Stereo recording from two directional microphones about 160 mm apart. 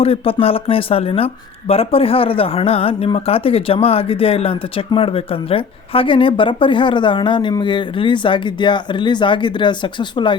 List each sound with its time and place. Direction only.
0.0 s speech: 35° left (ahead or behind)